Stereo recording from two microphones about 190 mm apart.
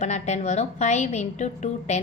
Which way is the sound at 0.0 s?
35° left (ahead or behind).